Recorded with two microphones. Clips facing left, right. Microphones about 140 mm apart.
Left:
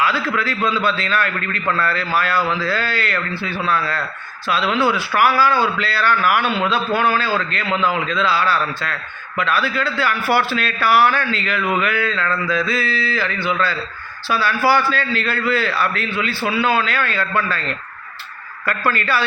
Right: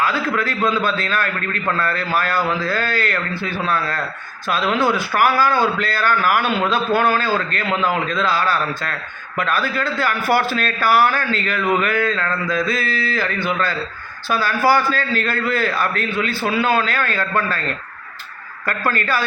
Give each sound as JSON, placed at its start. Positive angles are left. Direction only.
{"t": 0.0, "sound": "a man's voice", "side_deg": -45}
{"t": 18.9, "sound": "a man's voice", "side_deg": -45}